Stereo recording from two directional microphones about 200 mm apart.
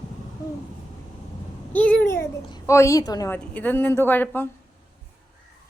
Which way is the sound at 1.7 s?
5° left (ahead or behind).